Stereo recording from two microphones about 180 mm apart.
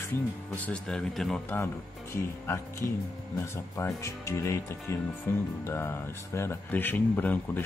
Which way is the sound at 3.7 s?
15° left (ahead or behind).